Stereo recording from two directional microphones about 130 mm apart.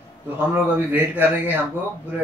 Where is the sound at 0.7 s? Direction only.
15° right (ahead or behind).